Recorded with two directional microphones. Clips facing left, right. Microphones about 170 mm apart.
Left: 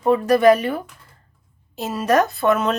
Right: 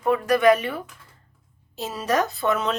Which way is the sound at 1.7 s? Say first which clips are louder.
Left 5 dB; 50° left (ahead or behind).